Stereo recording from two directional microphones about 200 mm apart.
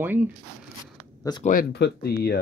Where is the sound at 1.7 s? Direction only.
55° left (ahead or behind).